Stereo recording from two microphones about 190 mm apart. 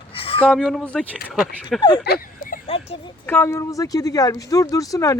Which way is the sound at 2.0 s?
55° left (ahead or behind).